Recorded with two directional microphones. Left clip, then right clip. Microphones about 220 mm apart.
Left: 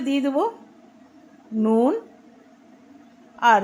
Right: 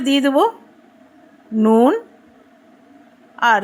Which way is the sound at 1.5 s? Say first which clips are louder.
Right 6 dB; 20° right (ahead or behind).